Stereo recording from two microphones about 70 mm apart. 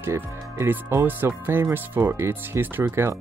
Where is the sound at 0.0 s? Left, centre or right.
Right.